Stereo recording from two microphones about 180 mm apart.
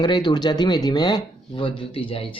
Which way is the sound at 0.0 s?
25° left (ahead or behind).